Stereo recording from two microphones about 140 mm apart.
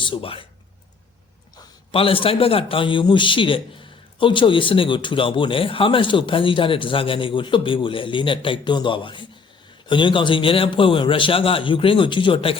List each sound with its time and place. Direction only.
0.0 s speech: 40° left (ahead or behind)
1.9 s speech: 40° left (ahead or behind)